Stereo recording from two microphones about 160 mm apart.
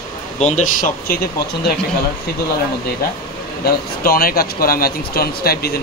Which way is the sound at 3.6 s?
65° left (ahead or behind).